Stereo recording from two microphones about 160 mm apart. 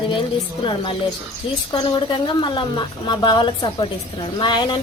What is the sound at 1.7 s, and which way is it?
A woman's voice, 30° left (ahead or behind).